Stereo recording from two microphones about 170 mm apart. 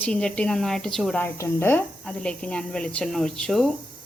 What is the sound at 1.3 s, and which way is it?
A woman's voice, 15° left (ahead or behind).